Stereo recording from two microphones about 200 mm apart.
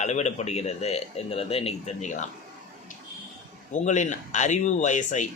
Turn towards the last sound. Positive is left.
turn(degrees=40)  # may be behind; listen again after turning